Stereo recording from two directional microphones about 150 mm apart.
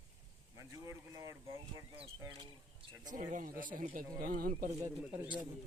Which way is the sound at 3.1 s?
60° right (ahead or behind).